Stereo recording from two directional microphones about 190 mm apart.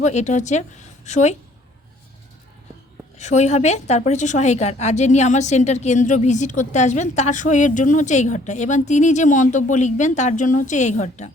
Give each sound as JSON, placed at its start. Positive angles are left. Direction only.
{"t": 0.0, "sound": "a woman's voice", "side_deg": 40}
{"t": 3.2, "sound": "a woman's voice", "side_deg": 35}